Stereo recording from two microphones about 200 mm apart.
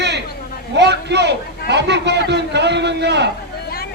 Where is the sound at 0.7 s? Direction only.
60° right (ahead or behind).